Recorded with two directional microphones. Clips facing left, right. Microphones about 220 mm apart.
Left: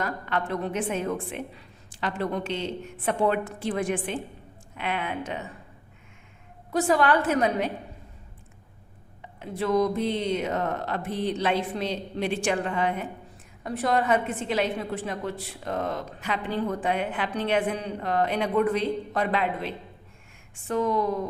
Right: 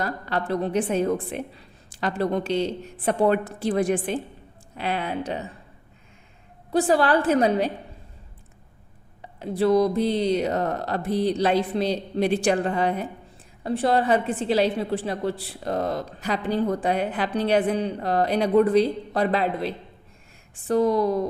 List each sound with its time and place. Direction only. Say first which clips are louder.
0.0 s a woman's voice: right 2 dB; 35° right (ahead or behind)
6.7 s a woman's voice: right 2 dB; 30° right (ahead or behind)
9.4 s a woman's voice: right 5 dB; 35° right (ahead or behind)